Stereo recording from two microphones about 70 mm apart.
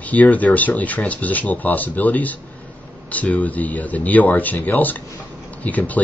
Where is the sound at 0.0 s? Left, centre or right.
Left.